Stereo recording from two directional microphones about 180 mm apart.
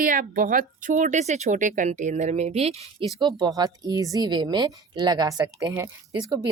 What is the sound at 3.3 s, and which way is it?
Speech, 20° right (ahead or behind).